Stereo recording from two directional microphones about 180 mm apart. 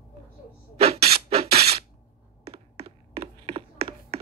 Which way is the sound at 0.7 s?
35° right (ahead or behind).